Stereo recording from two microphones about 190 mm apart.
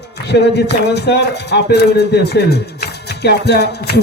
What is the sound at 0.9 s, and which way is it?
A man's voice, 65° left (ahead or behind).